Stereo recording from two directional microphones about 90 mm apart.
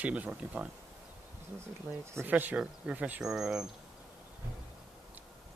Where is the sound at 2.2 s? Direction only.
20° right (ahead or behind).